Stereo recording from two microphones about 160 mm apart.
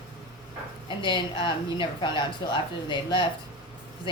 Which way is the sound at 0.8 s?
30° left (ahead or behind).